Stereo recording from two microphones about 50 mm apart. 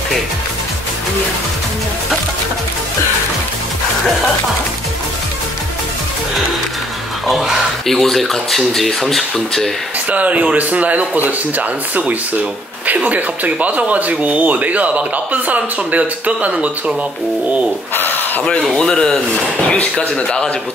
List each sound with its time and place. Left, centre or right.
7.2 s speech: centre
10.0 s speech: right
17.9 s a sound: left
18.8 s speech: centre